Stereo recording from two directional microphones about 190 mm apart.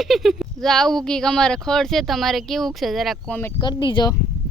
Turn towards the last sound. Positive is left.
turn(degrees=20)  # may be behind; listen again after turning